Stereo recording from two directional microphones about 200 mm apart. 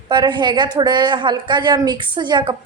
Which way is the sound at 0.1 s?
20° right (ahead or behind).